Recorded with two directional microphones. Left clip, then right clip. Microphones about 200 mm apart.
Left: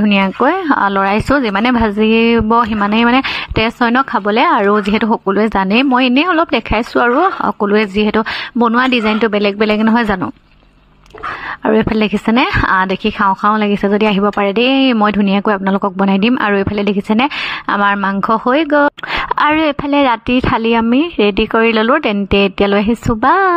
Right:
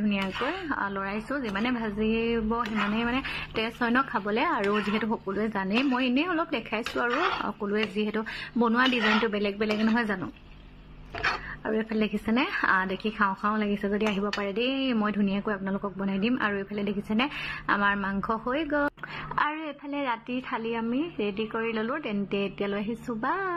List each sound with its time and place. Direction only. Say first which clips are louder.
0.0 s a woman's voice: left 17 dB; 55° left (ahead or behind)
11.6 s a woman's voice: left 17 dB; 50° left (ahead or behind)